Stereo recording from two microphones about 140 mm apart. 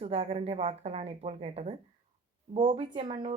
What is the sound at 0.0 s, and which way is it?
Speech, 45° right (ahead or behind).